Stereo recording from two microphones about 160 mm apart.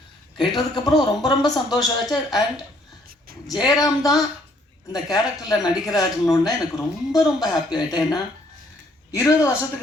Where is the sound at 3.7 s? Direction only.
25° left (ahead or behind).